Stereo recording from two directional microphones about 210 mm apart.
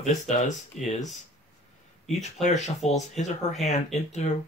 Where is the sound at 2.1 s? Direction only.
35° left (ahead or behind).